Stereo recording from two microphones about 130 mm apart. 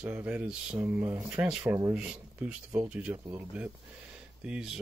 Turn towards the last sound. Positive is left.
turn(degrees=-5)  # may be behind; listen again after turning